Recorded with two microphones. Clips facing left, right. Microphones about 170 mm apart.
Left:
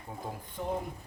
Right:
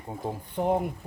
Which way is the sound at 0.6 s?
65° right (ahead or behind).